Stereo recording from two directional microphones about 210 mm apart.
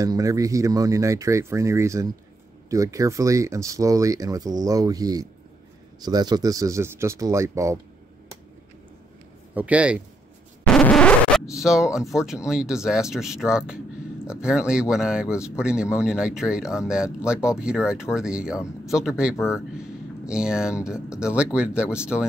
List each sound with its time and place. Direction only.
0.0 s speech: 15° right (ahead or behind)
9.5 s speech: 5° right (ahead or behind)
10.6 s a sound: 5° left (ahead or behind)
12.1 s speech: centre (ahead or behind)